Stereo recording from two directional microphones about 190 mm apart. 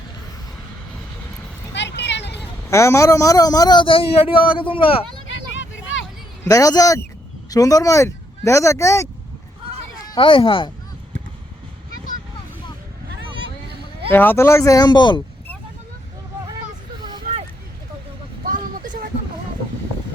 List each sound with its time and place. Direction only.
1.7 s vehicle: 65° left (ahead or behind)
2.6 s a man's voice: 15° left (ahead or behind)
5.3 s vehicle: 80° left
6.4 s speech: 15° left (ahead or behind)
10.1 s speech: 25° left (ahead or behind)
13.1 s vehicle: 60° right (ahead or behind)
14.1 s speech: 10° left (ahead or behind)
17.0 s vehicle: 25° right (ahead or behind)
18.4 s vehicle: 45° right (ahead or behind)